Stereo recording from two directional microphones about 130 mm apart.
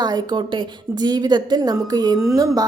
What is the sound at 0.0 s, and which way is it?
A woman's voice, 35° right (ahead or behind).